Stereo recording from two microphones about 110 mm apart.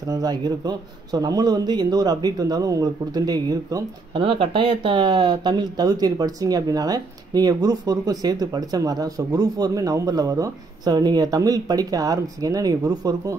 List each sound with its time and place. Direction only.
0.1 s speech: 40° right (ahead or behind)
4.1 s speech: 55° right (ahead or behind); by 13.4 s 35° right (ahead or behind)